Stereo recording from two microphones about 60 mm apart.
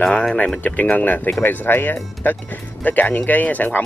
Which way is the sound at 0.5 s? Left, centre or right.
Left.